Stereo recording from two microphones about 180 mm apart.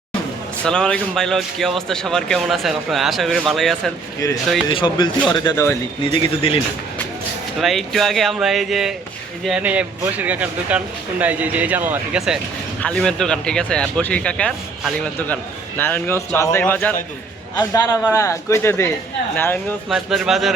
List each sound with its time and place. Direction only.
0.6 s speech: 5° left (ahead or behind)
4.7 s speech: 25° left (ahead or behind)
7.6 s a man's voice: centre (ahead or behind)
19.9 s speech: centre (ahead or behind)